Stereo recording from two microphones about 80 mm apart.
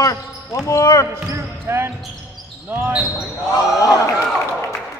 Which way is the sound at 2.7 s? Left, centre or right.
Right.